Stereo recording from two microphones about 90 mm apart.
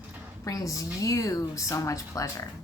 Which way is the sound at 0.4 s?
40° left (ahead or behind).